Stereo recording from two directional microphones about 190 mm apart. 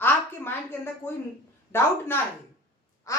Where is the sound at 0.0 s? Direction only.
10° left (ahead or behind).